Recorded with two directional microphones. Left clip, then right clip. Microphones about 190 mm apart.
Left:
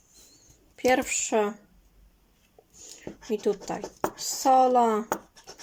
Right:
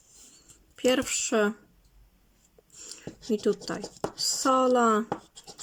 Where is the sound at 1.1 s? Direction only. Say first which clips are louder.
Even; 25° right (ahead or behind).